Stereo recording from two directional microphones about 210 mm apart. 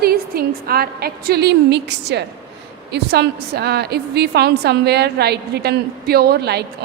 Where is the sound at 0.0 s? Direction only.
45° right (ahead or behind).